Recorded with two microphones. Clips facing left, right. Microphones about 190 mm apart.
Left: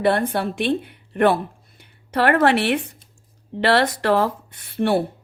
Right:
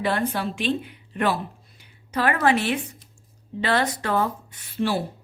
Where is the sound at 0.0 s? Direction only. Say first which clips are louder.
Left 5 dB; 55° left (ahead or behind).